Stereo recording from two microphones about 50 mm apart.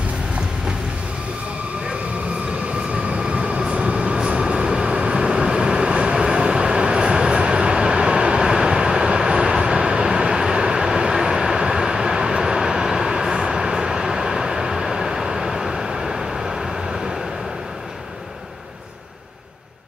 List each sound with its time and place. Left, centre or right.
2.9 s train: right; by 17.2 s centre